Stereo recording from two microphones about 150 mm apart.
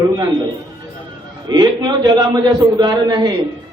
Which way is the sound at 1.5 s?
30° right (ahead or behind).